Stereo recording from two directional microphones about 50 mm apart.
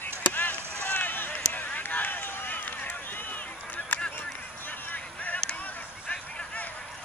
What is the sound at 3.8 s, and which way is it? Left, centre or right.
Honk, centre.